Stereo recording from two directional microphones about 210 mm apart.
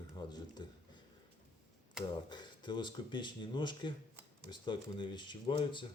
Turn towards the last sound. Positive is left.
turn(degrees=20)  # may be behind; listen again after turning